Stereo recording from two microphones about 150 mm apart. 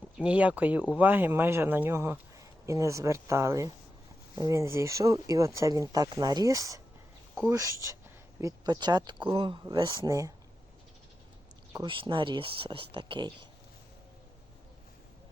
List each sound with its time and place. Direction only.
0.2 s speech: 10° right (ahead or behind)
11.7 s speech: 30° right (ahead or behind)